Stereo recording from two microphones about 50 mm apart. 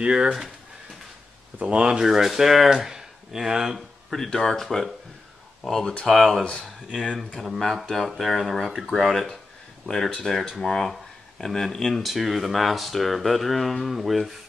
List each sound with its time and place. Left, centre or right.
0.0 s speech: centre
1.6 s speech: right
2.0 s speech: centre
4.1 s speech: centre
6.4 s speech: left
7.3 s speech: centre
11.9 s speech: centre